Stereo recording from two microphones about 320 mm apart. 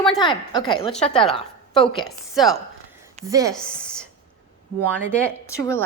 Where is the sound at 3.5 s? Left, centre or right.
Centre.